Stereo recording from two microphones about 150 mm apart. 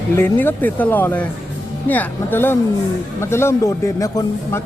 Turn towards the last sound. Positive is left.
turn(degrees=20)  # may be behind; listen again after turning